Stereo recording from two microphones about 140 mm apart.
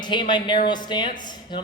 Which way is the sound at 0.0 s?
35° left (ahead or behind).